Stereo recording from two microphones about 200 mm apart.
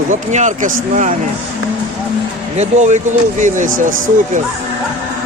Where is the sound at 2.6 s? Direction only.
35° right (ahead or behind).